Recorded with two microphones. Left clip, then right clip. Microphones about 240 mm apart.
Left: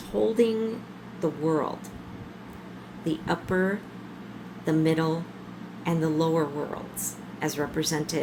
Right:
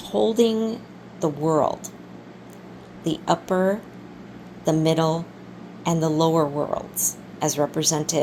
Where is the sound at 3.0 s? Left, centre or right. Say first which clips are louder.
Right 6 dB; right.